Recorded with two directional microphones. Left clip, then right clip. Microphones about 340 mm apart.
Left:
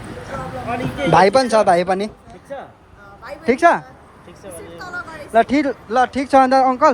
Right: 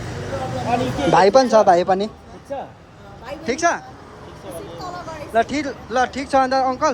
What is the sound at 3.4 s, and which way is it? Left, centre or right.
Speech, centre.